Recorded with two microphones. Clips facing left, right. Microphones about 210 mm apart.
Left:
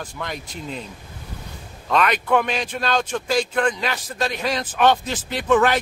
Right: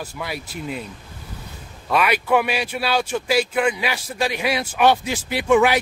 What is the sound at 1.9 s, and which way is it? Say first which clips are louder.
A man's voice: even; 10° right (ahead or behind).